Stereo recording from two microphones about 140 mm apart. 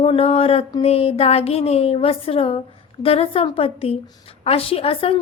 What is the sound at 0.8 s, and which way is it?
A woman's voice, 45° left (ahead or behind).